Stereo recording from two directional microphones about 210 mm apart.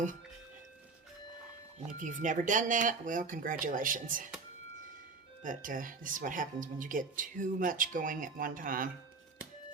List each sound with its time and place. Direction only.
1.9 s speech: 40° right (ahead or behind)
5.4 s speech: 40° right (ahead or behind)